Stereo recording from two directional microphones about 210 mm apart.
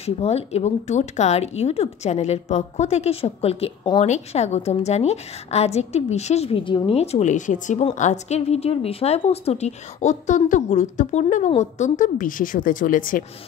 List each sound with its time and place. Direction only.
0.0 s speech: 30° left (ahead or behind)